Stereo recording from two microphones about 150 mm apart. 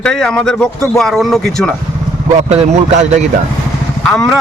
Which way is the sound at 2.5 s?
50° right (ahead or behind).